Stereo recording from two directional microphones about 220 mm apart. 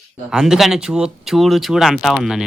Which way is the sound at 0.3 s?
Centre (ahead or behind).